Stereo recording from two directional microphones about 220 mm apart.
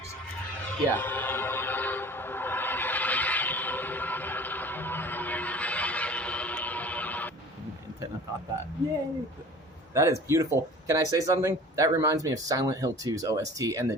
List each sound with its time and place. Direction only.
0.7 s train: 10° left (ahead or behind)
9.9 s speech: 15° right (ahead or behind)